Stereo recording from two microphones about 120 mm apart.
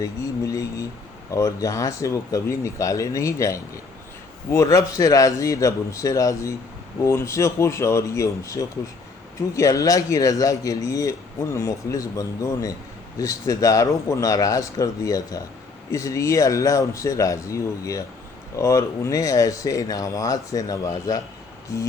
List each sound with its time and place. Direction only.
0.0 s speech: 30° left (ahead or behind)